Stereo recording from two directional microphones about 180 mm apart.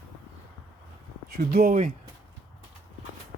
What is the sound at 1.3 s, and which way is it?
Speech, 55° right (ahead or behind).